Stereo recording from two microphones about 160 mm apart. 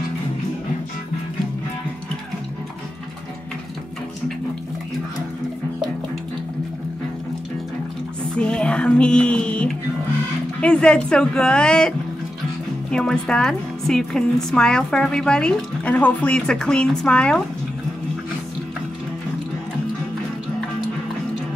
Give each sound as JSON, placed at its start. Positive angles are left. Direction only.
{"t": 8.4, "sound": "music", "side_deg": 5}
{"t": 10.6, "sound": "a woman's voice", "side_deg": 5}
{"t": 12.9, "sound": "a woman's voice", "side_deg": 5}